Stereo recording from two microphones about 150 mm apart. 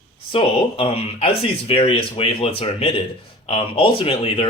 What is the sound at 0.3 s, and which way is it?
Speech, 40° left (ahead or behind).